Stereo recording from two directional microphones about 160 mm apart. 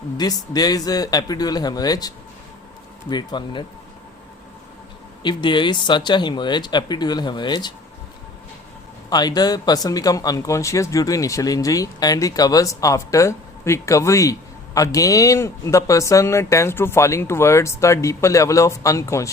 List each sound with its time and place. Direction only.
0.2 s speech: 25° left (ahead or behind)
5.2 s speech: 30° left (ahead or behind)
9.0 s speech: 25° left (ahead or behind)